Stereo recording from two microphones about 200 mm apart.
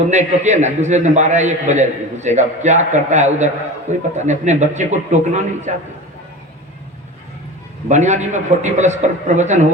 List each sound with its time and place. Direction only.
0.1 s a man's voice: 35° right (ahead or behind)
7.9 s a man's voice: 35° right (ahead or behind)